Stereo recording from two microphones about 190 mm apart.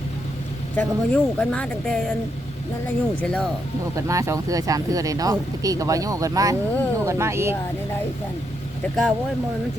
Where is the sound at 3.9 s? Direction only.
15° right (ahead or behind).